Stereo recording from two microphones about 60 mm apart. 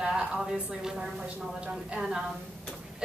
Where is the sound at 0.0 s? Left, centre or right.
Centre.